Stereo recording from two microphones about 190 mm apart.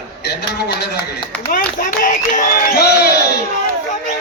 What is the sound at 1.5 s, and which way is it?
Speech, 50° left (ahead or behind).